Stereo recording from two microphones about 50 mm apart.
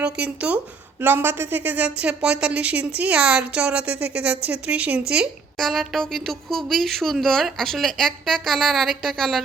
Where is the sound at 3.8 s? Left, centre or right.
Right.